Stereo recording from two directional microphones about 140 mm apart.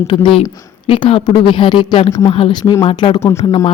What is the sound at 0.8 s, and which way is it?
A woman's voice, 40° left (ahead or behind).